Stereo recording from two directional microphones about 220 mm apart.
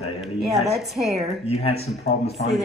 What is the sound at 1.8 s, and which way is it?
Speech, 30° left (ahead or behind).